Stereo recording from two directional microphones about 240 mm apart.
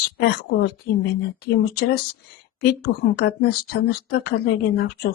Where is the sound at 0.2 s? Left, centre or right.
Left.